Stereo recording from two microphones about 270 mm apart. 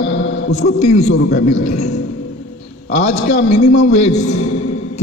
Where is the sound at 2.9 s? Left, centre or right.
Left.